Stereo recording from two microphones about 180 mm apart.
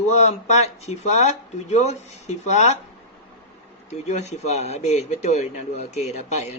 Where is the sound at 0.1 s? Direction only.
40° left (ahead or behind).